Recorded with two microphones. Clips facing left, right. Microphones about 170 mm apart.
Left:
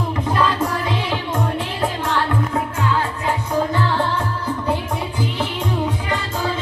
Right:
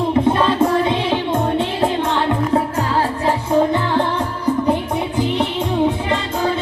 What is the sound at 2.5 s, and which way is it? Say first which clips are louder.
Music: right 4 dB; 35° right (ahead or behind).